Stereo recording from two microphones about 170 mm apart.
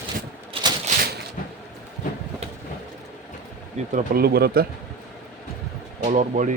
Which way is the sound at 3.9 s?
60° right (ahead or behind).